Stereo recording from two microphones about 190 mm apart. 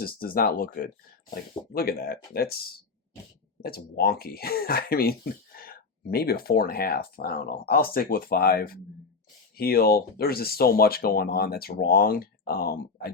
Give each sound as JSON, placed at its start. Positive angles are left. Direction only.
{"t": 0.0, "sound": "speech", "side_deg": 50}